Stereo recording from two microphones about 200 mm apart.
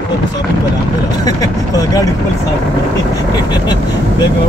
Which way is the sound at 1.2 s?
20° left (ahead or behind).